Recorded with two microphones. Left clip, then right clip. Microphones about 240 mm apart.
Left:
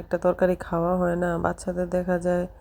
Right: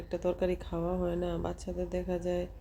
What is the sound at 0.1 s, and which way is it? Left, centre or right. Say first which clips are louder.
Speech: left 10 dB; left.